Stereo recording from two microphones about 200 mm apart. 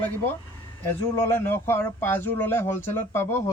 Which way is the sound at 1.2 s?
10° left (ahead or behind).